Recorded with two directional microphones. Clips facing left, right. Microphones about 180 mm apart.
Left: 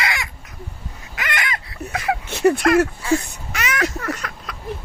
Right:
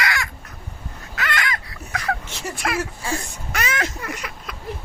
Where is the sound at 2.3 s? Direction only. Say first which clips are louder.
Left 16 dB; 60° left (ahead or behind).